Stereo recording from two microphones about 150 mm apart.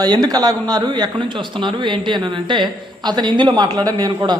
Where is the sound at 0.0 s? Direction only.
25° right (ahead or behind).